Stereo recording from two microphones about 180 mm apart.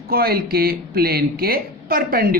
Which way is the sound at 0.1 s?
55° right (ahead or behind).